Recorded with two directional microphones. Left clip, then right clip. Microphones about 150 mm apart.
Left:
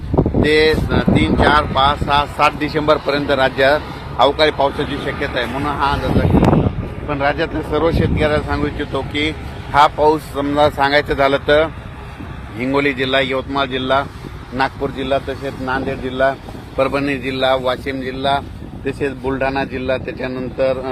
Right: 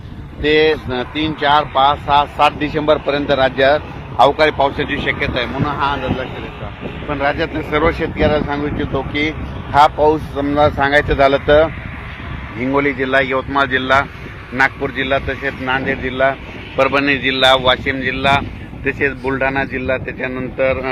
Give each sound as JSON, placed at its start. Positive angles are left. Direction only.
{"t": 0.4, "sound": "speech", "side_deg": -30}
{"t": 4.2, "sound": "speech", "side_deg": -15}
{"t": 7.1, "sound": "speech", "side_deg": 0}
{"t": 8.2, "sound": "speech", "side_deg": -30}
{"t": 12.7, "sound": "speech", "side_deg": -10}